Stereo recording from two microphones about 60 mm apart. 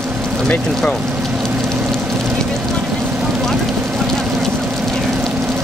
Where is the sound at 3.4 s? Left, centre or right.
Centre.